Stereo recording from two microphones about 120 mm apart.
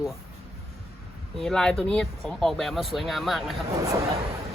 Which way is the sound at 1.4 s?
5° left (ahead or behind).